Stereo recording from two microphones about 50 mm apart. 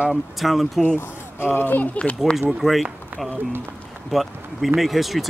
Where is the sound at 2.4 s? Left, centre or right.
Centre.